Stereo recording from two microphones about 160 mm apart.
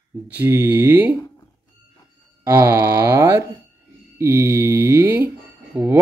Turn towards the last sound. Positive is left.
turn(degrees=-10)  # may be behind; listen again after turning